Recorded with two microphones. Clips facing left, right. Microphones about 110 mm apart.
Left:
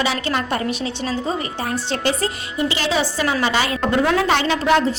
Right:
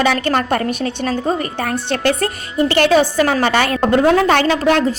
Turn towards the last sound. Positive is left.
turn(degrees=-50)  # may be behind; listen again after turning